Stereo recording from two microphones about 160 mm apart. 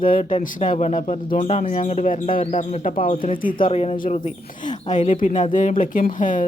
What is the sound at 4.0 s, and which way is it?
Speech, 50° left (ahead or behind).